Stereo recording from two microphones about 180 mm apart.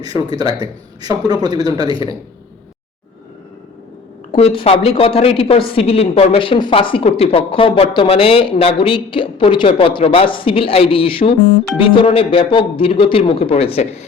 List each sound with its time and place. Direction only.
0.0 s a man's voice: 20° right (ahead or behind)
4.3 s speech: 30° left (ahead or behind)